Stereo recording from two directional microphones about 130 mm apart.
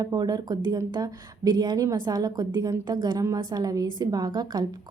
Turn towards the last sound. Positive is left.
turn(degrees=-30)  # may be behind; listen again after turning